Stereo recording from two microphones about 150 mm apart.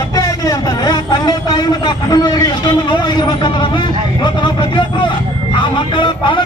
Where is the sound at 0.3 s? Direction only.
25° left (ahead or behind).